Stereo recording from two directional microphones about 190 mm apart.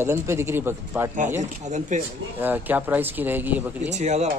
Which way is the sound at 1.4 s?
40° right (ahead or behind).